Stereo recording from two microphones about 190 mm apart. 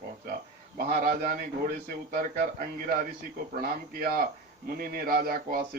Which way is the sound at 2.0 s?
50° right (ahead or behind).